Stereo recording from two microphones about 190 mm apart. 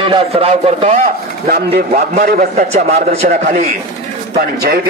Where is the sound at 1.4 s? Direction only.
50° right (ahead or behind).